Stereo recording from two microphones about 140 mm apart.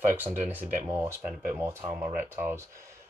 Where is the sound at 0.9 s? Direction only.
15° right (ahead or behind).